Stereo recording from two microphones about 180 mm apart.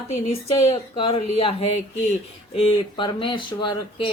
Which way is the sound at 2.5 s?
30° left (ahead or behind).